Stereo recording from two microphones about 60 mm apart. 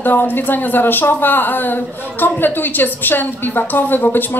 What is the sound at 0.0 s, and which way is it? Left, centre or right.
Speech, left.